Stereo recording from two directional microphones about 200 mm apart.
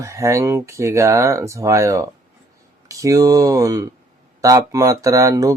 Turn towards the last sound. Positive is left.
turn(degrees=-15)  # may be behind; listen again after turning